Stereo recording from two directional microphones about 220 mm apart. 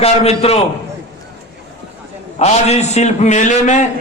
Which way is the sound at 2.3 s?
30° left (ahead or behind).